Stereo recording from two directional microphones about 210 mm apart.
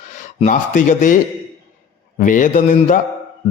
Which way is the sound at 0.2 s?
35° left (ahead or behind).